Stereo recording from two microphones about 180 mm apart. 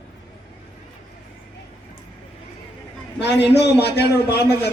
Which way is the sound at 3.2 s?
70° left (ahead or behind).